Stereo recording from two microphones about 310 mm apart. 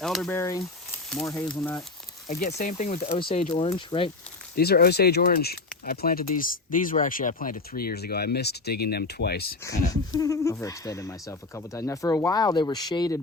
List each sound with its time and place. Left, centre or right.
0.0 s speech: centre
2.2 s speech: left
4.5 s speech: left
9.9 s speech: centre